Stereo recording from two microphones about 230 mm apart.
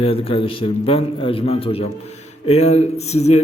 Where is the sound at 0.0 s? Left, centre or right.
Left.